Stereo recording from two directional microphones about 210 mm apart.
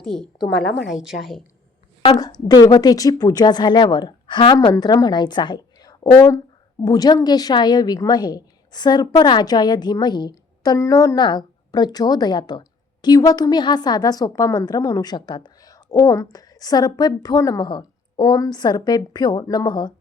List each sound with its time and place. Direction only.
0.0 s a woman's voice: centre (ahead or behind)
2.0 s a woman's voice: 30° left (ahead or behind)
2.2 s a woman's voice: 20° left (ahead or behind)